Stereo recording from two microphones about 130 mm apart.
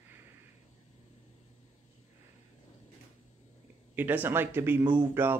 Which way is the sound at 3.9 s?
15° right (ahead or behind).